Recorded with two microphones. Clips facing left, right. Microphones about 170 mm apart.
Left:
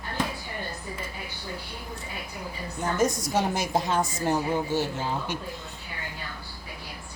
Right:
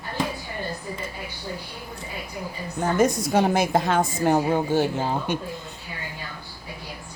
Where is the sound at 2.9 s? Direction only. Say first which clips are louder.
Right 5 dB; 60° right (ahead or behind).